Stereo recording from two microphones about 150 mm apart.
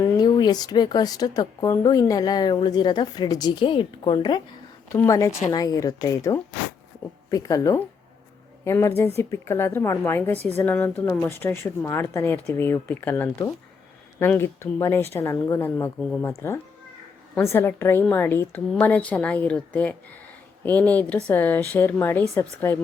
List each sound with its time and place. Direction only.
0.0 s a woman's voice: 25° left (ahead or behind)
17.4 s speech: 15° left (ahead or behind)